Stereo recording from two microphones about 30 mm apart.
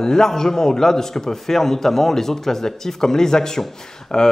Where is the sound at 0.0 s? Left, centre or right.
Left.